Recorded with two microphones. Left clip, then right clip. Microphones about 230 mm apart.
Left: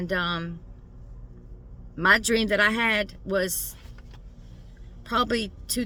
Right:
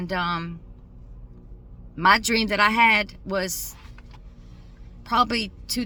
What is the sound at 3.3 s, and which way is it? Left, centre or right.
Speech, centre.